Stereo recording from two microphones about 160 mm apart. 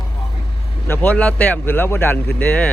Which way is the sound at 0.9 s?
10° left (ahead or behind).